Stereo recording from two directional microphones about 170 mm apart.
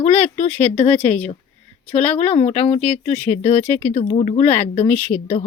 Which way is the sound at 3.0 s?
40° left (ahead or behind).